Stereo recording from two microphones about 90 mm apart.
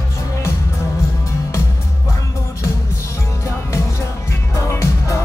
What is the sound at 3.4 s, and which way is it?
Music, 30° left (ahead or behind).